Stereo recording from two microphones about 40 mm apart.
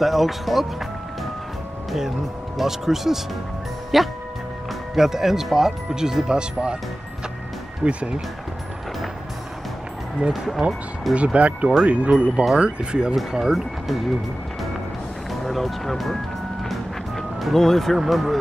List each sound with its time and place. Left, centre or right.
0.0 s speech: centre; by 6.8 s right
7.8 s speech: right
10.3 s speech: centre
11.3 s speech: right
13.3 s speech: centre
15.4 s speech: centre
17.4 s speech: centre
17.9 s speech: centre